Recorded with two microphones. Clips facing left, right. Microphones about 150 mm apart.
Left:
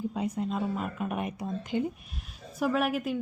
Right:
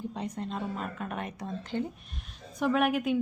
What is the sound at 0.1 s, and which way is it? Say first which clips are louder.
A woman's voice: left 4 dB; 10° left (ahead or behind).